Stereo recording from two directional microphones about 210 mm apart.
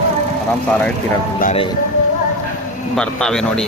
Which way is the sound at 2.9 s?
5° left (ahead or behind).